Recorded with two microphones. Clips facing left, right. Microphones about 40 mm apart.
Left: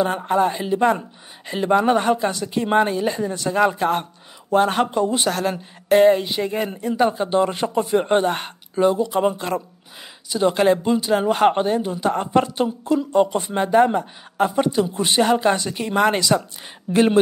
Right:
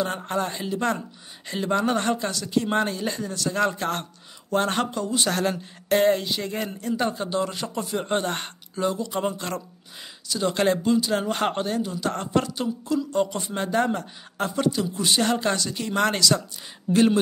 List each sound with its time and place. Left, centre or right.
0.0 s speech: centre
4.9 s speech: left
5.3 s speech: centre
7.2 s speech: left
15.2 s speech: centre